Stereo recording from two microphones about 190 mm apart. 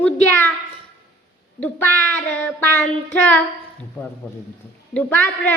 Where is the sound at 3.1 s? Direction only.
5° left (ahead or behind).